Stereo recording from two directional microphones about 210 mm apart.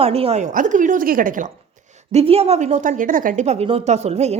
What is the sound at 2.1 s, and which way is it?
A woman's voice, 30° right (ahead or behind).